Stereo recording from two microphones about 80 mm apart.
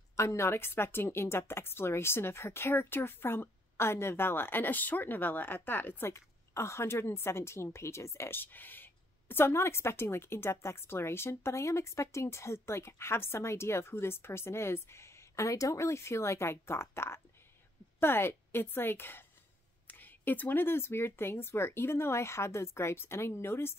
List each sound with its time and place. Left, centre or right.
0.1 s a woman's voice: left